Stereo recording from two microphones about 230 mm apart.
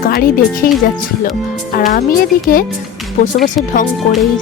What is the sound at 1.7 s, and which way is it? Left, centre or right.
Speech, left.